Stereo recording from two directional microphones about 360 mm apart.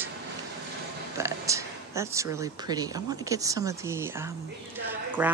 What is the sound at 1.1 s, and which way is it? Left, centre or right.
Speech, centre.